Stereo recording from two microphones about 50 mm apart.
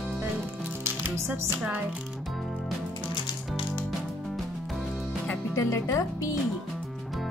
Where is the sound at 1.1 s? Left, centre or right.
Right.